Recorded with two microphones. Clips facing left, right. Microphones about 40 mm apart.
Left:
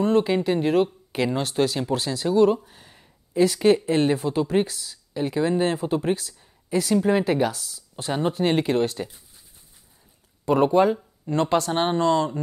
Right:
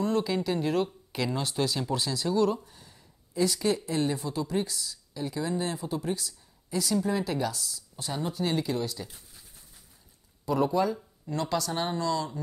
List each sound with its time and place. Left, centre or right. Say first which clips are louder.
0.0 s speech: left 7 dB; left
2.7 s a sound: left 4 dB; left
3.5 s speech: left 9 dB; left
4.6 s speech: left 1 dB; left
5.2 s speech: left 9 dB; left
7.9 s speech: left 9 dB; left
10.4 s speech: left 8 dB; left